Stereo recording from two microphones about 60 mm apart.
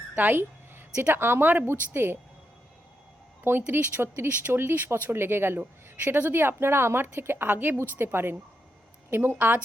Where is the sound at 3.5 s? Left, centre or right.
Right.